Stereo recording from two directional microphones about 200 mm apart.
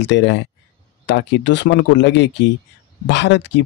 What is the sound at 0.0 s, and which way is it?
Speech, 60° left (ahead or behind).